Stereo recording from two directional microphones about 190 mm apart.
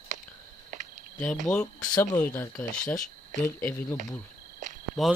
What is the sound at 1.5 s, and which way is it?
Speech, 15° left (ahead or behind).